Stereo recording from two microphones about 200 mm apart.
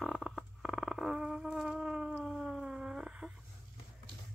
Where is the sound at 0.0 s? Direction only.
Centre (ahead or behind).